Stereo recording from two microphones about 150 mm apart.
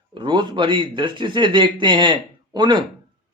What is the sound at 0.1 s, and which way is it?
Speech, 30° right (ahead or behind).